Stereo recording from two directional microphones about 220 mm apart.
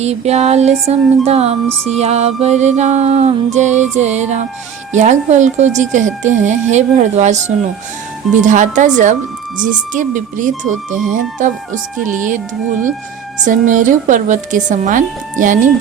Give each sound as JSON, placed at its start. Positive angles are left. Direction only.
{"t": 0.0, "sound": "music", "side_deg": -30}
{"t": 1.9, "sound": "speech", "side_deg": -30}
{"t": 13.4, "sound": "speech", "side_deg": -35}